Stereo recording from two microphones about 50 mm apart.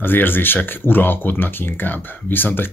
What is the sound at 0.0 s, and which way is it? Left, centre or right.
Speech, left.